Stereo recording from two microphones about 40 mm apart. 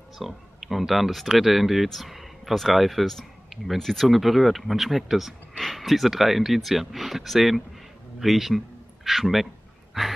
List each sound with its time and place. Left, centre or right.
0.2 s speech: centre
9.9 s sigh: centre